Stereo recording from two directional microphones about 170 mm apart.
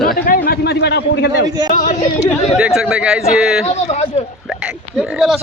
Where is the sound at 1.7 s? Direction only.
50° left (ahead or behind).